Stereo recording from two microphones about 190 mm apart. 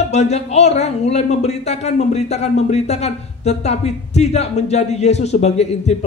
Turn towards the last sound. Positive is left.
turn(degrees=35)  # may be behind; listen again after turning